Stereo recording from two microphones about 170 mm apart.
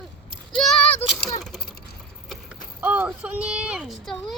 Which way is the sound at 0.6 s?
5° left (ahead or behind).